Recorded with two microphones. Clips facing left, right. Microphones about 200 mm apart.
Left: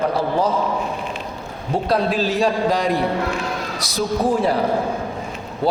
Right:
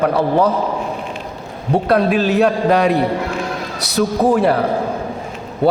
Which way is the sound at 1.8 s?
60° right (ahead or behind).